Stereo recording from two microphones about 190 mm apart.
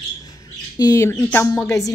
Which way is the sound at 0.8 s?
15° left (ahead or behind).